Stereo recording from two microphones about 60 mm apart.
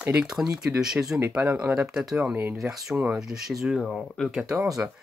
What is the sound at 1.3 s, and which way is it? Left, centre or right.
Speech, right.